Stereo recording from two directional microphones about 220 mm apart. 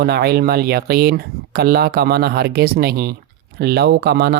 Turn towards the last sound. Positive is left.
turn(degrees=-45)  # may be behind; listen again after turning